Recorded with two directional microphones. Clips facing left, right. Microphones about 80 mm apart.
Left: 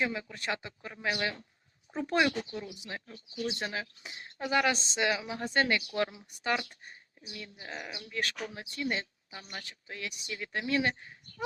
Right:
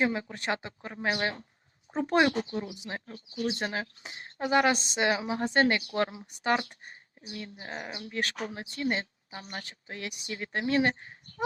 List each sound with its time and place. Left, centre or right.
0.0 s speech: right